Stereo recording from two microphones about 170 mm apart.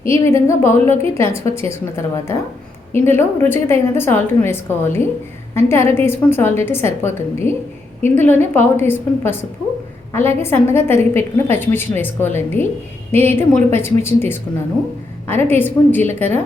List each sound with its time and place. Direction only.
0.3 s a woman's voice: 15° left (ahead or behind)